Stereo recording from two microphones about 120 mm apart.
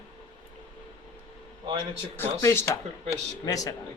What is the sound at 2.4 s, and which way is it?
Speech, 25° left (ahead or behind).